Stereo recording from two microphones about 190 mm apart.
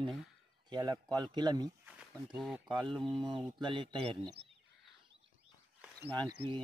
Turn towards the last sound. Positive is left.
turn(degrees=-25)  # may be behind; listen again after turning